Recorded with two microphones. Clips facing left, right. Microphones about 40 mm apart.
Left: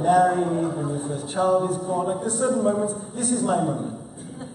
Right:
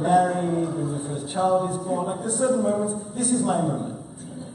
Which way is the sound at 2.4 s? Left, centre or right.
Centre.